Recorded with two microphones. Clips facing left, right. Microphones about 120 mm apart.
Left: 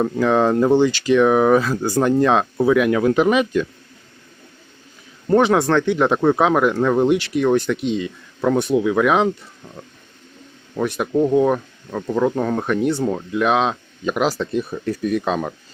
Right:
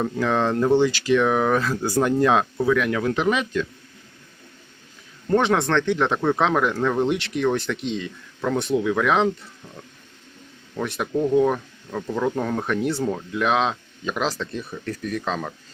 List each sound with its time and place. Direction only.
0.0 s speech: 5° left (ahead or behind)
2.6 s speech: 15° left (ahead or behind)
5.3 s speech: 5° left (ahead or behind)
9.6 s speech: 20° left (ahead or behind)
10.8 s speech: centre (ahead or behind)
11.1 s speech: 20° left (ahead or behind)
11.3 s speech: 10° left (ahead or behind)